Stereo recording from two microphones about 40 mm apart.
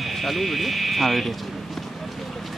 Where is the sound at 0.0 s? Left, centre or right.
Centre.